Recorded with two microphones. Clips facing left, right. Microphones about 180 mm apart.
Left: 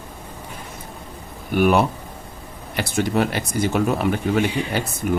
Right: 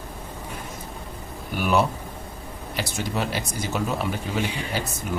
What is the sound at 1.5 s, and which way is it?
Speech, 55° left (ahead or behind).